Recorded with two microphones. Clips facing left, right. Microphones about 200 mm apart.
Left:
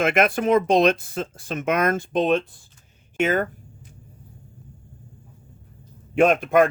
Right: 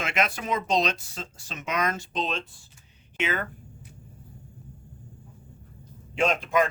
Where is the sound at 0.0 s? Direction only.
55° left (ahead or behind).